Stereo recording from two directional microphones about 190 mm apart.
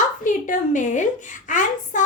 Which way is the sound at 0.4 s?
40° left (ahead or behind).